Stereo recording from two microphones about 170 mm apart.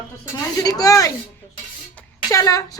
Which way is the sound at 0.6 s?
20° left (ahead or behind).